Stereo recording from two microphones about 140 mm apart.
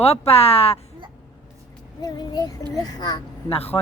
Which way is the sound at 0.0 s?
45° left (ahead or behind).